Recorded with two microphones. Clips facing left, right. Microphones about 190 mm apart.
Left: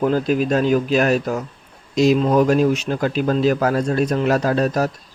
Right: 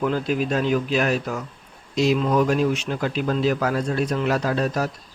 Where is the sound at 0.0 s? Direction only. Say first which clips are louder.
Left 5 dB; 40° left (ahead or behind).